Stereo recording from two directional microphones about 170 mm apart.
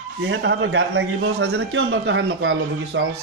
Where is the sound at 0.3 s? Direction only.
90° right.